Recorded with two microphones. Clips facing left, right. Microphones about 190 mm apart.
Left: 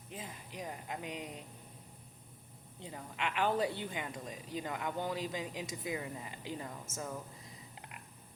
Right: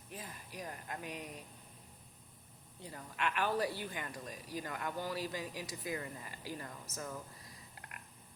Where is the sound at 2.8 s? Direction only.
20° left (ahead or behind).